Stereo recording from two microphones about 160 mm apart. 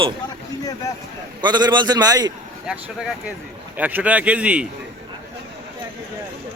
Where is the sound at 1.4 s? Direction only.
25° right (ahead or behind).